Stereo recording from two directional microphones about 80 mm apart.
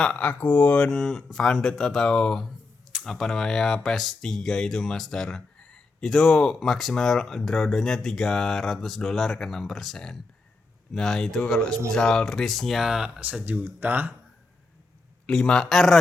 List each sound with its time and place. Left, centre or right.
0.0 s speech: centre
13.4 s speech: centre
15.3 s speech: centre